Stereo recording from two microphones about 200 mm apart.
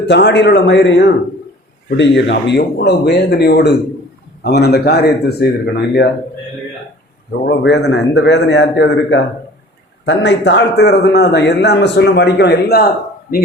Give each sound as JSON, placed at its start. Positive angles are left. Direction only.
{"t": 0.1, "sound": "a man's voice", "side_deg": 60}
{"t": 7.4, "sound": "a man's voice", "side_deg": 60}